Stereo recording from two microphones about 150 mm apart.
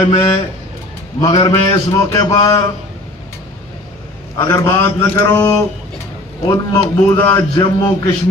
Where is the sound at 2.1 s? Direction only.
25° left (ahead or behind).